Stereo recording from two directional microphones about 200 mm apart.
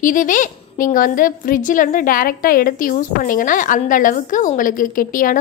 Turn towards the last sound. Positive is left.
turn(degrees=45)  # may be behind; listen again after turning